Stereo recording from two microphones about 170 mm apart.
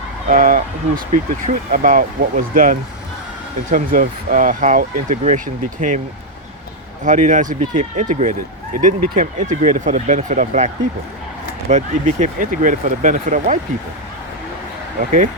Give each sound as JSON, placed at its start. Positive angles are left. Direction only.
{"t": 0.3, "sound": "speech", "side_deg": -55}
{"t": 7.0, "sound": "speech", "side_deg": -45}
{"t": 11.7, "sound": "speech", "side_deg": -45}